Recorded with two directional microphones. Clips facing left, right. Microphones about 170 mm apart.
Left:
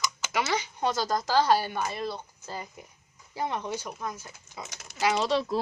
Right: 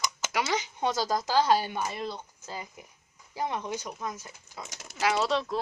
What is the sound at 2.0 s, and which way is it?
Speech, 15° left (ahead or behind).